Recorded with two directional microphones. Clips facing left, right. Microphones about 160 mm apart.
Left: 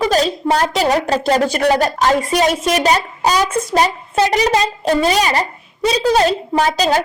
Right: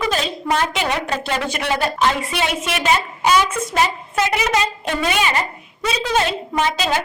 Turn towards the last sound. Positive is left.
turn(degrees=40)  # may be behind; listen again after turning